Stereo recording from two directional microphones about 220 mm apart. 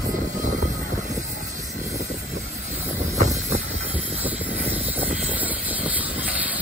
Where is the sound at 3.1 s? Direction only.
30° right (ahead or behind).